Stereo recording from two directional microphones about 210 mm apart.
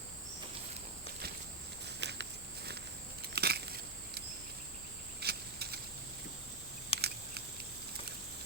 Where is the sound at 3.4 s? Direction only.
50° right (ahead or behind).